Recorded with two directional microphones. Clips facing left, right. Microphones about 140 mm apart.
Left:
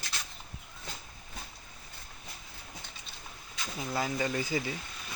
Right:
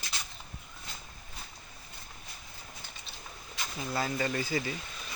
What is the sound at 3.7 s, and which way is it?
Speech, 10° left (ahead or behind).